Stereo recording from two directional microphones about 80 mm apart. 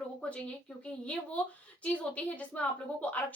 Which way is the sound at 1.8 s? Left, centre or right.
Centre.